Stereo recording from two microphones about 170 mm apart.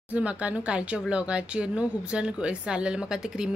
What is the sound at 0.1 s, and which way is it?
Speech, 10° right (ahead or behind).